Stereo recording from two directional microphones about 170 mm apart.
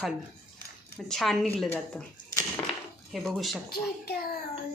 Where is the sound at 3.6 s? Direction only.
70° left (ahead or behind).